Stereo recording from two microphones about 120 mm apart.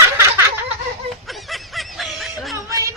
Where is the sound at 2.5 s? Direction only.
25° right (ahead or behind).